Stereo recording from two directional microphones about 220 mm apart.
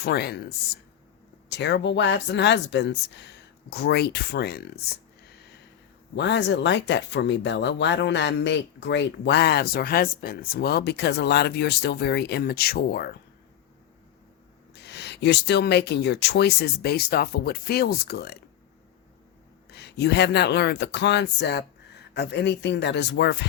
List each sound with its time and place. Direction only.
0.0 s speech: 50° left (ahead or behind)
1.5 s speech: 50° left (ahead or behind)
6.1 s speech: 55° left (ahead or behind)
14.8 s speech: 50° left (ahead or behind)
19.7 s speech: 50° left (ahead or behind)